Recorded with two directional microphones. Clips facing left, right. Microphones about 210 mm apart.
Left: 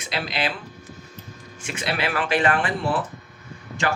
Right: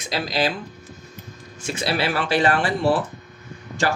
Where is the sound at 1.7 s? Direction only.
35° right (ahead or behind).